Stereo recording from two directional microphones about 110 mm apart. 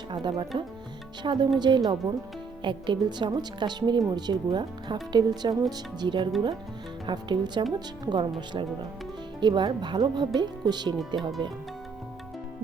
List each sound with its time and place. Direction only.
0.1 s speech: 45° right (ahead or behind)
9.4 s speech: 40° right (ahead or behind)